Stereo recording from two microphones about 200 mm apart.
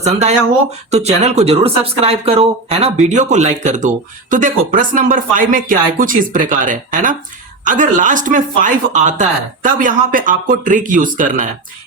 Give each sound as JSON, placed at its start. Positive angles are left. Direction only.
{"t": 0.0, "sound": "speech", "side_deg": -35}